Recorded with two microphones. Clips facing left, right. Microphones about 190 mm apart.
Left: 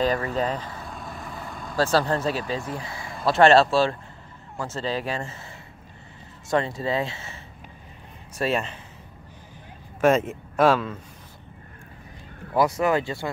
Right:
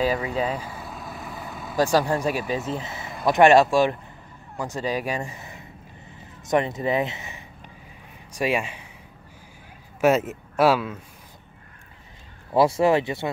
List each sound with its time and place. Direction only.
0.0 s vehicle: 10° right (ahead or behind)
1.8 s speech: 15° right (ahead or behind)
9.9 s speech: 5° right (ahead or behind)
12.5 s speech: 30° right (ahead or behind)